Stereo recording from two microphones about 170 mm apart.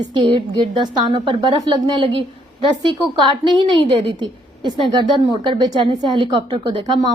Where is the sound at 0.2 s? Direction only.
25° right (ahead or behind).